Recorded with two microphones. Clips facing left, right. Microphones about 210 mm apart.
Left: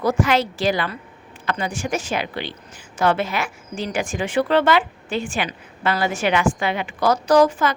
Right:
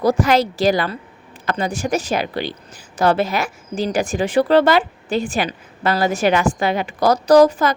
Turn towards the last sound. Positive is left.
turn(degrees=-40)  # may be behind; listen again after turning